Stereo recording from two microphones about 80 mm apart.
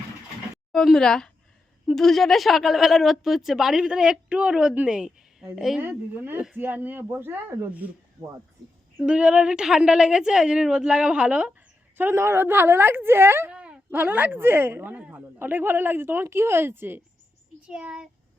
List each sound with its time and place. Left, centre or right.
0.9 s a woman's voice: centre
6.1 s a woman's voice: right
9.0 s a woman's voice: centre
11.9 s a woman's voice: right
13.5 s a sound: centre
13.9 s a woman's voice: right
17.7 s a woman's voice: centre